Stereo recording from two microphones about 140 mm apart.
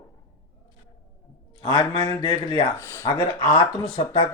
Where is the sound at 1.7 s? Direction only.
30° left (ahead or behind).